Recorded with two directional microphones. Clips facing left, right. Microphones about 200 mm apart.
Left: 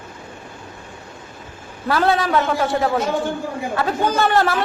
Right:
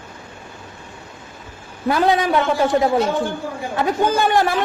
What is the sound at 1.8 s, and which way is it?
A man's voice, 15° right (ahead or behind).